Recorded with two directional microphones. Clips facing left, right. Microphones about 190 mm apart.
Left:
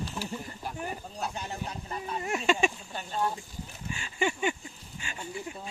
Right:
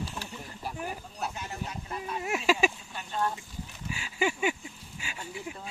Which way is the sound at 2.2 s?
5° right (ahead or behind).